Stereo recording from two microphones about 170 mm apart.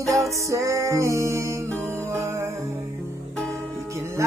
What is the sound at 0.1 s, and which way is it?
Music, 20° right (ahead or behind).